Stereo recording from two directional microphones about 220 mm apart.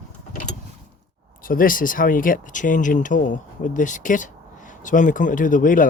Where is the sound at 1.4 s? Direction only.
40° left (ahead or behind).